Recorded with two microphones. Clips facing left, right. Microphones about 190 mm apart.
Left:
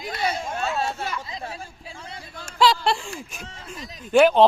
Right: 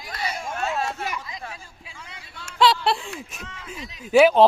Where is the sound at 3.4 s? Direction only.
35° left (ahead or behind).